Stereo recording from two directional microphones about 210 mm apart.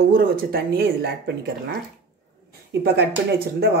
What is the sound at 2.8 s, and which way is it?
Speech, 50° right (ahead or behind).